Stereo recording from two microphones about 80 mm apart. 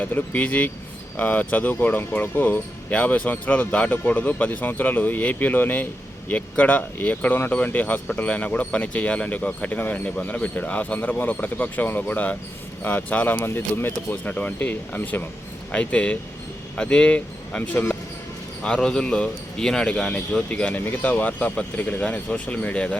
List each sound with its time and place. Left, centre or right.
0.0 s speech: left